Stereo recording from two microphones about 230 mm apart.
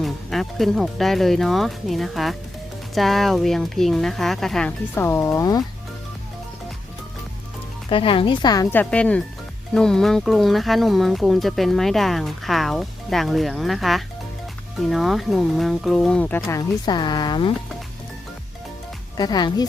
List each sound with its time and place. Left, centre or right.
0.0 s speech: centre
7.9 s speech: left
19.1 s speech: centre